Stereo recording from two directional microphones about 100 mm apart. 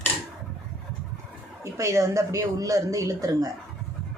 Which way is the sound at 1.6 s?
30° right (ahead or behind).